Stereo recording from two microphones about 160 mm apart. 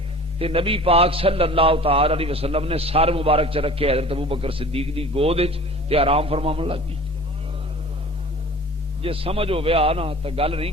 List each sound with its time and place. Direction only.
0.3 s a man's voice: 35° right (ahead or behind)
9.0 s a man's voice: 35° right (ahead or behind)